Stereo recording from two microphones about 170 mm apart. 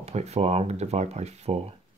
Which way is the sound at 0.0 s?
40° right (ahead or behind).